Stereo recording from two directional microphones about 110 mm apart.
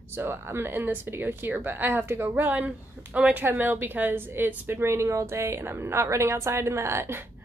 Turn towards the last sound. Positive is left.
turn(degrees=-25)  # may be behind; listen again after turning